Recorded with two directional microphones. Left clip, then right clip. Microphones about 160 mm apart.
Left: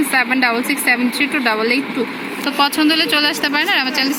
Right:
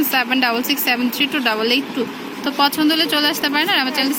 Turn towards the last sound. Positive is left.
turn(degrees=0)  # may be behind; listen again after turning